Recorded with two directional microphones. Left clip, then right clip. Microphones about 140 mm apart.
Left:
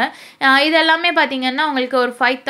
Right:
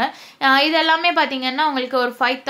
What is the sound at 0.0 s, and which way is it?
A woman's voice, 25° left (ahead or behind).